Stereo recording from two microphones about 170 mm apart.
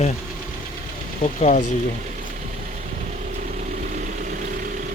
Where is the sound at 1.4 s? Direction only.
45° left (ahead or behind).